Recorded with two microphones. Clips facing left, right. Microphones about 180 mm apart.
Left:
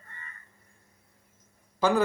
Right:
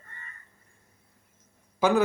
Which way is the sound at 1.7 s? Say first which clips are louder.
Right 2 dB; 10° right (ahead or behind).